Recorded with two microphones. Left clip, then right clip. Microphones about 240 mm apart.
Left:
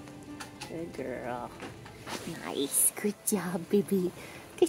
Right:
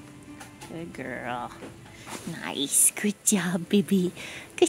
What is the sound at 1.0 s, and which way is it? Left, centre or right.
Speech, right.